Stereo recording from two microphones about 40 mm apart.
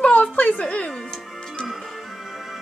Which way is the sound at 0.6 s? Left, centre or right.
Left.